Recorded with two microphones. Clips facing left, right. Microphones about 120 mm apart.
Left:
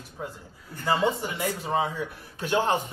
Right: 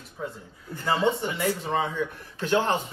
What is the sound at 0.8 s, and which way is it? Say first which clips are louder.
A man's voice: right 1 dB; 10° left (ahead or behind).